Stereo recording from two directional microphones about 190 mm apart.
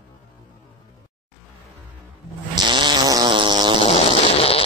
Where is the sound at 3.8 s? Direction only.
30° left (ahead or behind).